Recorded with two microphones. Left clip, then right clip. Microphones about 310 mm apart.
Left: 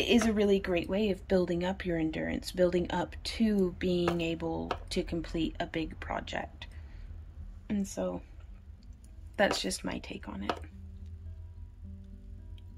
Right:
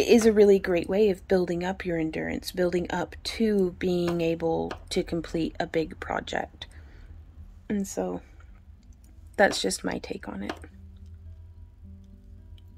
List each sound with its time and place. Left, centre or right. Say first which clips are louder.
0.0 s speech: right 9 dB; centre
9.3 s speech: right 6 dB; centre